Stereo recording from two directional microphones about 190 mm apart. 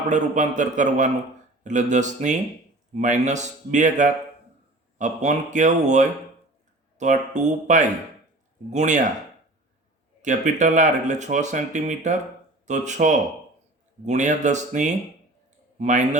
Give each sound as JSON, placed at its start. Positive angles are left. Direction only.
{"t": 0.1, "sound": "speech", "side_deg": -40}
{"t": 10.2, "sound": "speech", "side_deg": -40}